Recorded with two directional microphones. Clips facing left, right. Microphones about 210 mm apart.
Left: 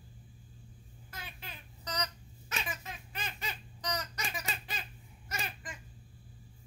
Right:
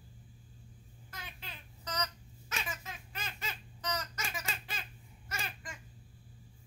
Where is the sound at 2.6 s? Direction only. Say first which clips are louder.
Left 1 dB; 15° left (ahead or behind).